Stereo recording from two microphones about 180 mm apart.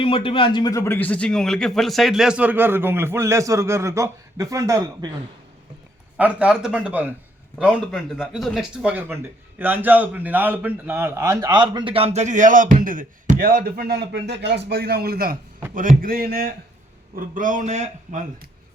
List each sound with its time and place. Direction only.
0.0 s a man's voice: 30° left (ahead or behind); by 5.1 s 20° right (ahead or behind)
6.1 s a man's voice: 5° right (ahead or behind); by 18.2 s 40° right (ahead or behind)